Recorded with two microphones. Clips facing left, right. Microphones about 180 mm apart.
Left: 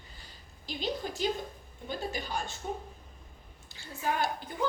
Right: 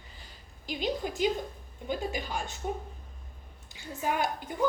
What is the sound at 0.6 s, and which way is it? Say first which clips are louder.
A woman's voice: right 3 dB; 15° right (ahead or behind).